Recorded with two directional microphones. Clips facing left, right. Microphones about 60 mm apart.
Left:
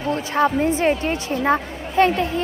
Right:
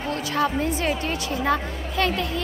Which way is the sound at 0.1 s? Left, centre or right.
Left.